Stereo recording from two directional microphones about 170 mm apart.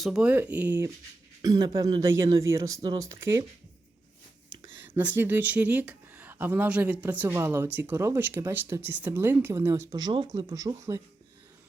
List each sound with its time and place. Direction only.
0.0 s speech: 5° right (ahead or behind)
1.4 s speech: 25° right (ahead or behind)
4.9 s speech: 10° right (ahead or behind)